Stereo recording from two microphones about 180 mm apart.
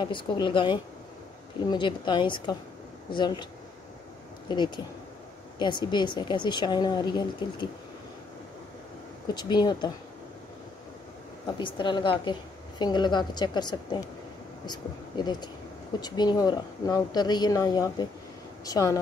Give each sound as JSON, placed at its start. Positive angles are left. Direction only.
{"t": 0.0, "sound": "a woman's voice", "side_deg": 25}
{"t": 4.5, "sound": "a woman's voice", "side_deg": 25}
{"t": 9.3, "sound": "a woman's voice", "side_deg": 25}
{"t": 11.4, "sound": "a woman's voice", "side_deg": 25}